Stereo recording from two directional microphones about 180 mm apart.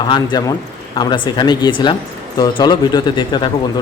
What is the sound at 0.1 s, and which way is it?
Speech, 25° left (ahead or behind).